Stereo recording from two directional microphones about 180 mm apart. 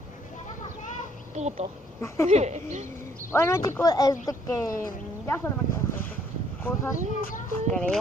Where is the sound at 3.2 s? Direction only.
15° left (ahead or behind).